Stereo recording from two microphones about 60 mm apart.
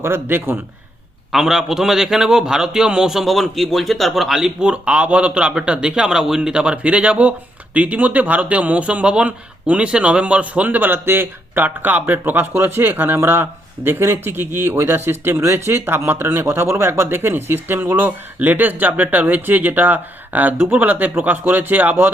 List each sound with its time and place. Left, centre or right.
0.0 s speech: right
1.3 s a man's voice: centre; by 22.1 s right